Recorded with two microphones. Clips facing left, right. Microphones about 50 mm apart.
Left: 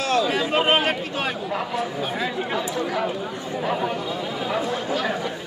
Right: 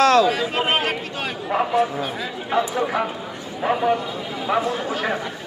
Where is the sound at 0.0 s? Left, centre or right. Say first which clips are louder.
Right 7 dB; right.